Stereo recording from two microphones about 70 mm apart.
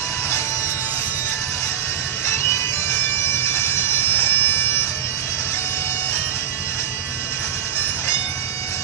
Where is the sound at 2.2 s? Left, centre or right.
Left.